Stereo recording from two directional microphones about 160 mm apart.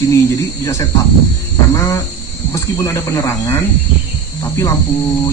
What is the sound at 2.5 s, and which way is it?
Speech, 15° left (ahead or behind).